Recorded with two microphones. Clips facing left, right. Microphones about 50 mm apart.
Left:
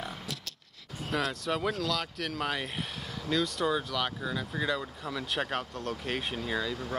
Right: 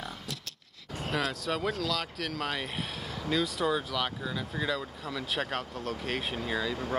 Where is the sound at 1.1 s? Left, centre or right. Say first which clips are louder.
Left 1 dB; centre.